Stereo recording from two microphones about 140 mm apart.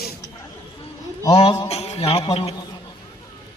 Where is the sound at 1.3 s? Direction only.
45° left (ahead or behind).